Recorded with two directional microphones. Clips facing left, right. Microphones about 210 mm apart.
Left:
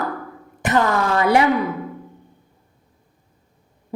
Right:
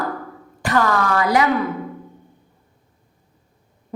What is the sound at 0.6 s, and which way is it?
Speech, 20° left (ahead or behind).